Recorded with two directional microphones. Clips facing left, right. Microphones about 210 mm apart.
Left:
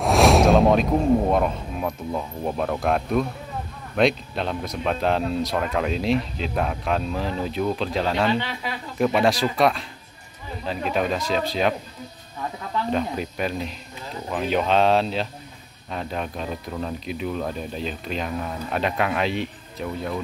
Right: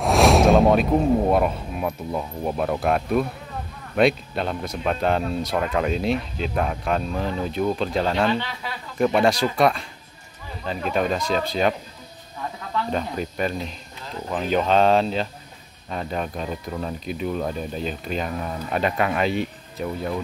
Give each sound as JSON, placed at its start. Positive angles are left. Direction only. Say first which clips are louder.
{"t": 0.0, "sound": "speech", "louder": "even", "side_deg": 0}
{"t": 12.9, "sound": "speech", "louder": "left 1 dB", "side_deg": 5}